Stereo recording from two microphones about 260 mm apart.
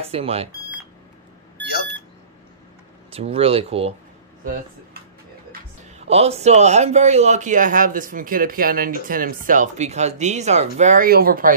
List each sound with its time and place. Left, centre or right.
0.0 s speech: right
3.1 s speech: right
6.0 s speech: right